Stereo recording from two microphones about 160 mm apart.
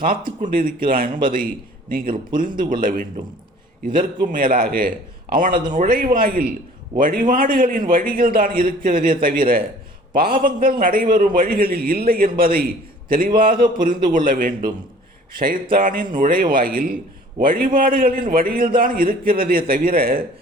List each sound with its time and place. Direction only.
0.4 s a man's voice: 60° right (ahead or behind)
4.3 s a man's voice: 60° right (ahead or behind)